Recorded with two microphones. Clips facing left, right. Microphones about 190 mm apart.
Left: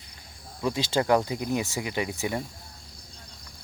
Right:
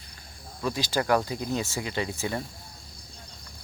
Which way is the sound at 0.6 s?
25° left (ahead or behind).